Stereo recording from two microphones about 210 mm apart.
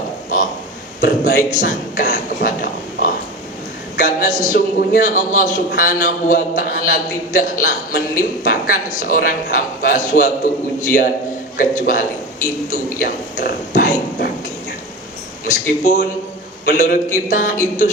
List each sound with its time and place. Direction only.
1.0 s a man's voice: 35° left (ahead or behind)
15.4 s a man's voice: 35° left (ahead or behind)